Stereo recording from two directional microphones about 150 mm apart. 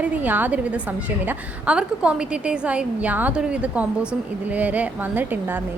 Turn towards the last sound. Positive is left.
turn(degrees=-10)  # may be behind; listen again after turning